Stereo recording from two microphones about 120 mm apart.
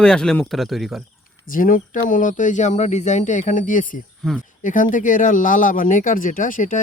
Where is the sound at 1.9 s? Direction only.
90° left.